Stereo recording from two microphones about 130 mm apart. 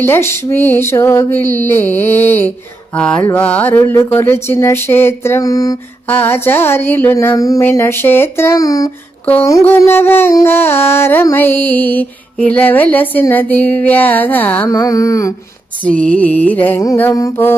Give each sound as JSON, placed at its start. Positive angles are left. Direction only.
{"t": 0.0, "sound": "music", "side_deg": 20}
{"t": 3.4, "sound": "speech", "side_deg": 10}
{"t": 6.1, "sound": "music", "side_deg": 15}
{"t": 9.2, "sound": "music", "side_deg": 15}
{"t": 14.7, "sound": "speech", "side_deg": 25}
{"t": 15.8, "sound": "music", "side_deg": 10}
{"t": 16.8, "sound": "speech", "side_deg": 20}